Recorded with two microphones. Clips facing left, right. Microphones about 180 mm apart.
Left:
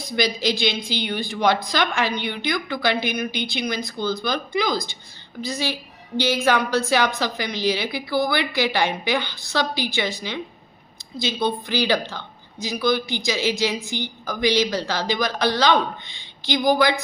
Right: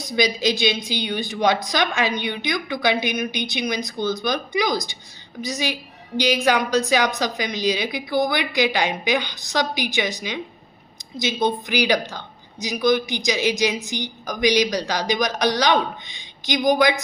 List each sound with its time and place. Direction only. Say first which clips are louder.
0.0 s a woman's voice: right 2 dB; 15° right (ahead or behind)